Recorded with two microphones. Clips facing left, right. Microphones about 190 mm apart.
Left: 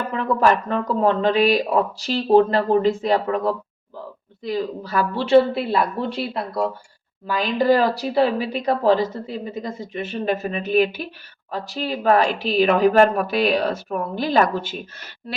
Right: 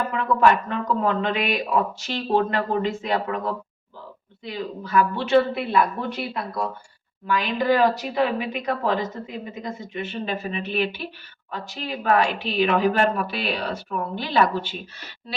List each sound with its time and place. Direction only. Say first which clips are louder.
0.1 s speech: left 2 dB; 35° left (ahead or behind)